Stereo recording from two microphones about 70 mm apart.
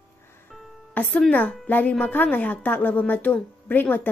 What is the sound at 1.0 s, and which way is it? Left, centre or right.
Speech, left.